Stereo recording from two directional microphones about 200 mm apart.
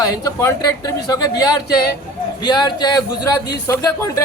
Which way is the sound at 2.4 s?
20° left (ahead or behind).